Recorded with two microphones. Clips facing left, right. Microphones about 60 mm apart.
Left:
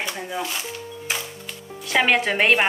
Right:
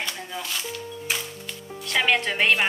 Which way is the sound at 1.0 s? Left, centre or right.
Centre.